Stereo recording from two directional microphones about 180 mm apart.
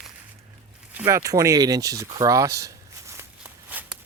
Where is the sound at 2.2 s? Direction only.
20° right (ahead or behind).